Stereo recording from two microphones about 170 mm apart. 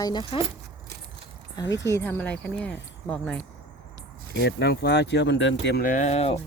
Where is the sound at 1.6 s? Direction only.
90° left.